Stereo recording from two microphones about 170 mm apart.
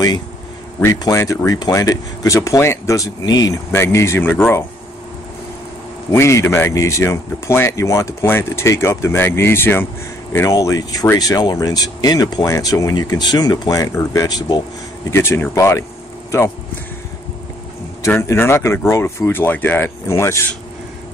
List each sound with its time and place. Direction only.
0.7 s speech: 20° left (ahead or behind)
6.1 s speech: 15° left (ahead or behind)
18.0 s speech: 15° left (ahead or behind)